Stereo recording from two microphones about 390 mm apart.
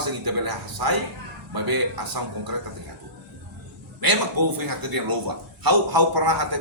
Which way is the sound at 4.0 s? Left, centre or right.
Right.